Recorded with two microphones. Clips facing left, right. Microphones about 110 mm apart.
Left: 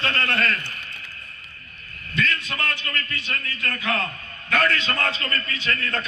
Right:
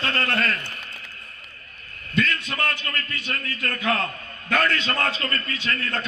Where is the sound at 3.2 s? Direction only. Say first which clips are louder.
Right 1 dB; 40° right (ahead or behind).